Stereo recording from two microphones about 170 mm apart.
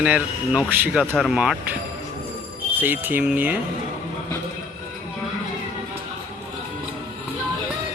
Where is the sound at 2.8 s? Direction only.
10° right (ahead or behind).